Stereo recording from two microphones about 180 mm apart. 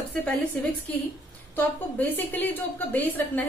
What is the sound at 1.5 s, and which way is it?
A woman's voice, 10° left (ahead or behind).